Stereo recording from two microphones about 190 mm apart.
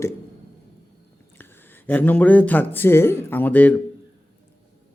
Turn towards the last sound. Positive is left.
turn(degrees=10)  # may be behind; listen again after turning